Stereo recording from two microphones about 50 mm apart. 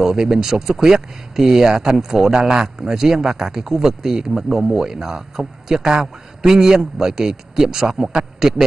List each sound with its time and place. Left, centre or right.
0.0 s speech: centre